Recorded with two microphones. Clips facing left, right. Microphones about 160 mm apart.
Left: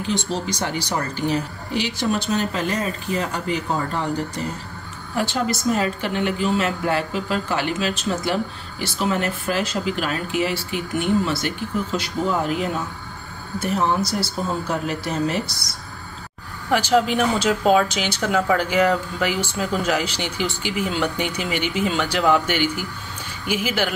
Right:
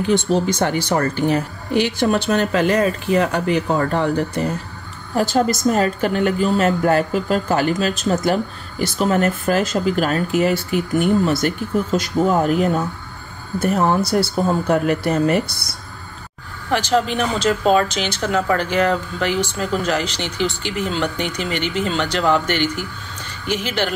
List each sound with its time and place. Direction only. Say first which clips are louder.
0.1 s speech: right 7 dB; 55° right (ahead or behind)
5.1 s a woman's voice: right 5 dB; 40° right (ahead or behind); by 15.7 s 60° right (ahead or behind)
16.7 s speech: even; 10° left (ahead or behind)